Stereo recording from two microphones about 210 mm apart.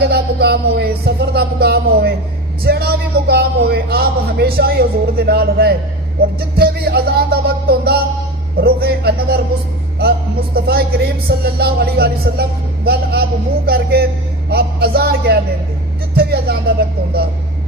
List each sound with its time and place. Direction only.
0.0 s music: 50° right (ahead or behind)
10.0 s speech: 50° right (ahead or behind)